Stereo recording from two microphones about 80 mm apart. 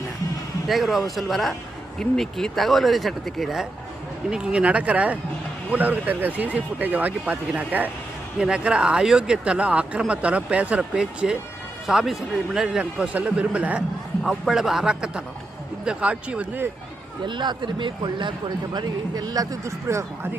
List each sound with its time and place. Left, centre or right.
0.7 s a man's voice: centre
17.2 s a man's voice: right